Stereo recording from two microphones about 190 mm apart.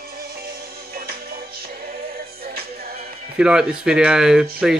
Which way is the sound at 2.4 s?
55° right (ahead or behind).